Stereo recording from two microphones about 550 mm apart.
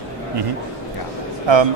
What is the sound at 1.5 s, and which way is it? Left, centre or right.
Speech, right.